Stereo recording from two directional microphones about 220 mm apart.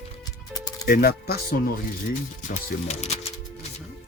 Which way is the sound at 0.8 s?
40° left (ahead or behind).